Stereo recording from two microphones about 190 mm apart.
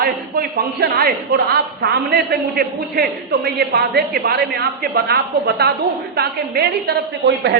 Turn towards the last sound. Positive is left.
turn(degrees=-60)  # may be behind; listen again after turning